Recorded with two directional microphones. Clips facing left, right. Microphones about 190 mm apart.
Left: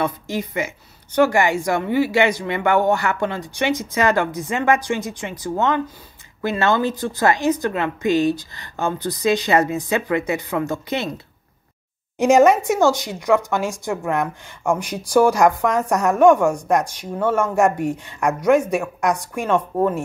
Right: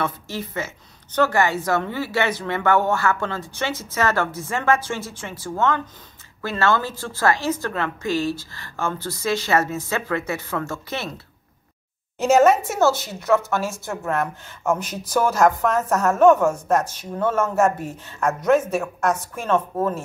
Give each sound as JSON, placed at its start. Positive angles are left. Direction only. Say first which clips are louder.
{"t": 0.0, "sound": "speech", "louder": "left 4 dB", "side_deg": 15}
{"t": 12.2, "sound": "speech", "louder": "left 2 dB", "side_deg": 15}